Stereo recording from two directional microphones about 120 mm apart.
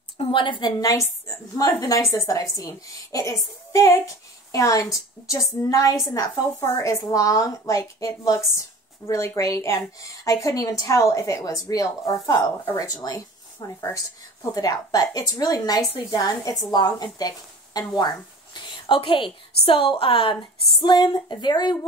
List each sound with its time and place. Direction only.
0.2 s a woman's voice: 45° left (ahead or behind)